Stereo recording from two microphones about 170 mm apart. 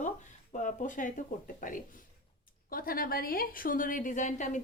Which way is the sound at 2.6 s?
60° left (ahead or behind).